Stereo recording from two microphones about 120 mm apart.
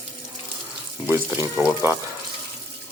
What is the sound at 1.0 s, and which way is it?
Speech, 20° right (ahead or behind).